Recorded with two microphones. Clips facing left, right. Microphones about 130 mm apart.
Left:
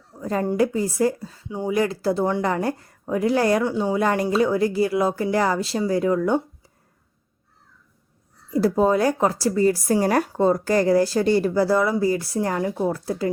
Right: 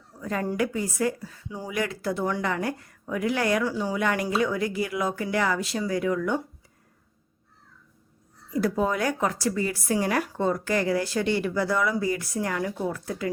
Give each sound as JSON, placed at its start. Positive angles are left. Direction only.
{"t": 0.1, "sound": "a woman's voice", "side_deg": 30}
{"t": 8.4, "sound": "a woman's voice", "side_deg": 30}